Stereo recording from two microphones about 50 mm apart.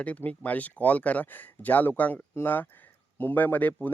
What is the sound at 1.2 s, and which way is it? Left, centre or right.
A man's voice, left.